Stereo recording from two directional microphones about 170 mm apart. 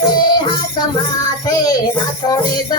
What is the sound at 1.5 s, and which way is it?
Child singing, 20° left (ahead or behind).